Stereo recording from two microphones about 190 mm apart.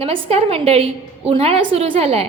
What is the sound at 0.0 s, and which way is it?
A woman's voice, 30° right (ahead or behind).